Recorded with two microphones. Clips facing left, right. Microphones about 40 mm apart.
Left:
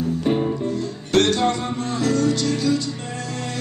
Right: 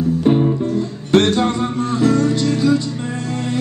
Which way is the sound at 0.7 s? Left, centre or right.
Centre.